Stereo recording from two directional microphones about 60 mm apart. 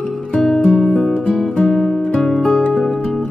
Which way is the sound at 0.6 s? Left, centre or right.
Centre.